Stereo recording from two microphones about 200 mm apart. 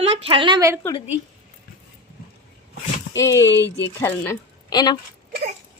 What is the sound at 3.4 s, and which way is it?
Speech, 65° left (ahead or behind).